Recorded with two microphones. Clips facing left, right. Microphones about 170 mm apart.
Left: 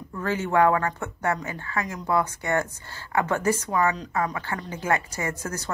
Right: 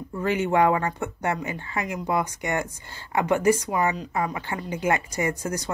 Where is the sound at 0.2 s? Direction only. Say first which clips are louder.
Even; 15° right (ahead or behind).